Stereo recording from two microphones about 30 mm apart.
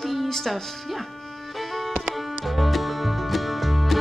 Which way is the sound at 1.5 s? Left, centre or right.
Centre.